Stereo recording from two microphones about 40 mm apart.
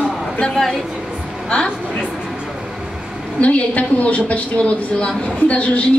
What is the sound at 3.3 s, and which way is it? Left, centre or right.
A woman's voice, left.